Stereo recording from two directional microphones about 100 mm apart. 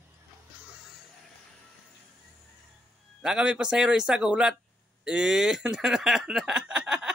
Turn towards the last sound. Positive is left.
turn(degrees=-5)  # may be behind; listen again after turning